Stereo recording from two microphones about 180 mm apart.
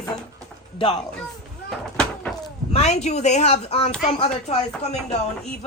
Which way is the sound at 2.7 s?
40° left (ahead or behind).